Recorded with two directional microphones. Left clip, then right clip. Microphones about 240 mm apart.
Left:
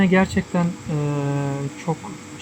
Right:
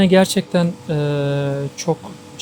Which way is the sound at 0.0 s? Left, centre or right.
Right.